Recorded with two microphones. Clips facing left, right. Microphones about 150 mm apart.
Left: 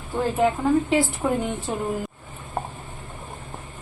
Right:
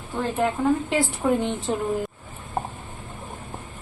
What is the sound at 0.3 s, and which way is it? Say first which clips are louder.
A woman's voice: left 2 dB; centre (ahead or behind).